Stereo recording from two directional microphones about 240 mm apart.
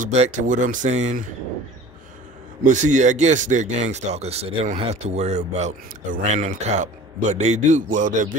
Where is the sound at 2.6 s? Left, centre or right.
Right.